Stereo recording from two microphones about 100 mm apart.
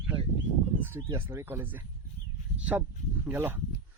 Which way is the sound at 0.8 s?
20° right (ahead or behind).